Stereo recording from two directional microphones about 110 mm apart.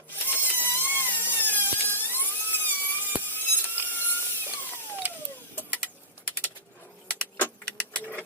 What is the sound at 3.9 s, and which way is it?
Ratchet, 20° left (ahead or behind).